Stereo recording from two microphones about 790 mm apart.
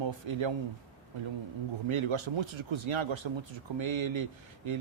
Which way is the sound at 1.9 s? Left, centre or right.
Right.